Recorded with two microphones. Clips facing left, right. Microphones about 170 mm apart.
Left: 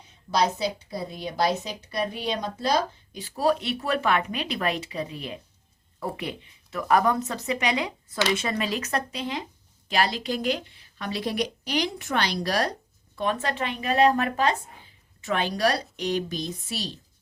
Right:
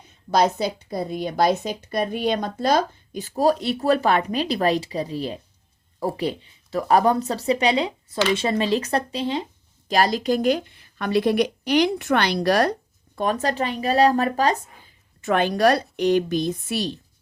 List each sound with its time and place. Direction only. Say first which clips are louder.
0.3 s a woman's voice: right 4 dB; 50° right (ahead or behind); by 9.4 s 30° right (ahead or behind)
9.9 s speech: right 6 dB; 45° right (ahead or behind); by 12.7 s 60° right (ahead or behind)
13.1 s speech: right 4 dB; 40° right (ahead or behind)
15.2 s a woman's voice: right 6 dB; 50° right (ahead or behind)